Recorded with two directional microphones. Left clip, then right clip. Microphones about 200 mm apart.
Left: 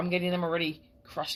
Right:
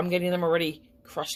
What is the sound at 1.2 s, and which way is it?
Speech, 20° right (ahead or behind).